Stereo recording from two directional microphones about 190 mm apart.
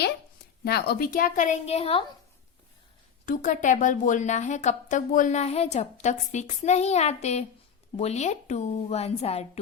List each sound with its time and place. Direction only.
0.6 s speech: 55° left (ahead or behind); by 2.0 s 30° left (ahead or behind)
3.2 s speech: 40° left (ahead or behind)